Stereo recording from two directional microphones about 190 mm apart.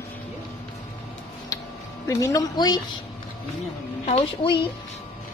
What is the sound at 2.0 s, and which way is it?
Speech, 15° left (ahead or behind).